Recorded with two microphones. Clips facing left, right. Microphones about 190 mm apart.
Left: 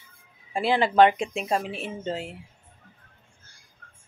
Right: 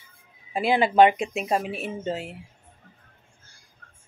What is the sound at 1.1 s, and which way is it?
A woman's voice, 5° right (ahead or behind).